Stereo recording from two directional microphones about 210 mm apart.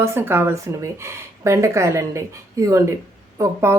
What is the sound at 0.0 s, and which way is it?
Speech, 10° right (ahead or behind).